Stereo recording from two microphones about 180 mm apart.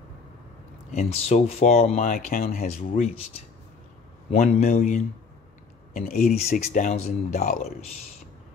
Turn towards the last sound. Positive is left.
turn(degrees=40)  # may be behind; listen again after turning